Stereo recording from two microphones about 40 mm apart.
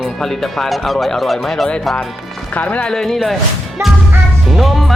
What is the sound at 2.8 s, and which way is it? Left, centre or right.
Speech, centre.